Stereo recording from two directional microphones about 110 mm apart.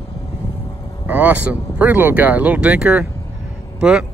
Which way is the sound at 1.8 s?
15° right (ahead or behind).